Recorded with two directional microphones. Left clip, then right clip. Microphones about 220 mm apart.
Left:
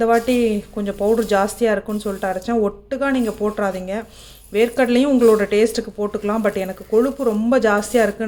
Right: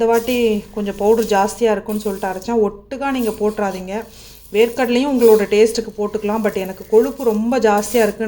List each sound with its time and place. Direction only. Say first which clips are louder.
0.0 s speech: right 1 dB; 5° left (ahead or behind)